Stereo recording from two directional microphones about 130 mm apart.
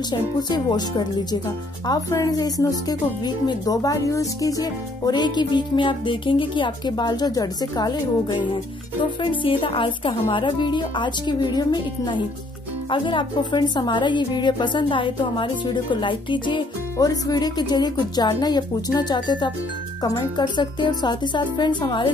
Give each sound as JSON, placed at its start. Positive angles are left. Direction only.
{"t": 0.1, "sound": "a woman's voice", "side_deg": 35}